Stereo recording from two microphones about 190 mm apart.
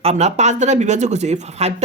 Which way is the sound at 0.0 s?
35° right (ahead or behind).